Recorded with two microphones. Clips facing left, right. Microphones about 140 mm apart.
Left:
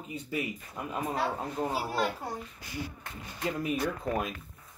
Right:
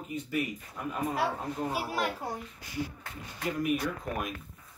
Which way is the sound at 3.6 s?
25° left (ahead or behind).